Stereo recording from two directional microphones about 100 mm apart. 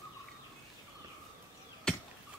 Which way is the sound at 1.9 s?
5° left (ahead or behind).